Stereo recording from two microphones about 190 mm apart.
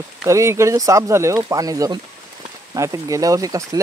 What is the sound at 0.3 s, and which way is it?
Speech, 15° right (ahead or behind).